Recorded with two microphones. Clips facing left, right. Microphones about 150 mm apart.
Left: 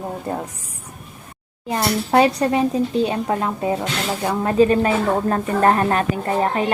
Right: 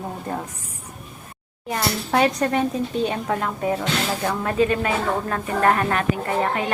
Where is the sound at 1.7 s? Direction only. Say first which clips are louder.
Left 4 dB; 25° left (ahead or behind).